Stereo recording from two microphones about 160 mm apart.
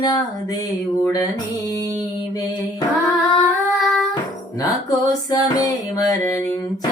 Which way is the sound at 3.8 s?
Centre (ahead or behind).